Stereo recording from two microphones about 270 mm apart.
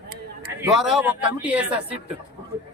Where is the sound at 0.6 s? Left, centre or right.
Centre.